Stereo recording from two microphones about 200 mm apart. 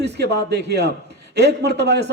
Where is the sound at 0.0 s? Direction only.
55° right (ahead or behind).